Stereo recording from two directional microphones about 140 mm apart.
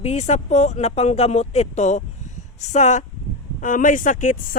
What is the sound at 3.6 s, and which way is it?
Speech, 70° left (ahead or behind).